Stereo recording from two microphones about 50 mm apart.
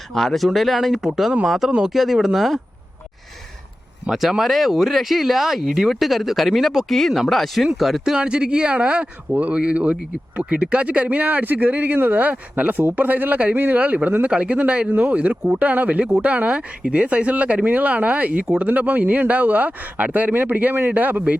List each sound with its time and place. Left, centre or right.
0.1 s speech: centre
4.1 s speech: centre; by 21.3 s right